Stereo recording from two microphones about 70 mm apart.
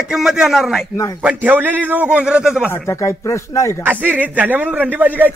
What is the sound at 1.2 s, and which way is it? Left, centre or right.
A man's voice, right.